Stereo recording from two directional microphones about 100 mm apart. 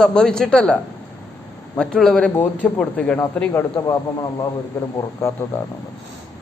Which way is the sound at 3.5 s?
25° left (ahead or behind).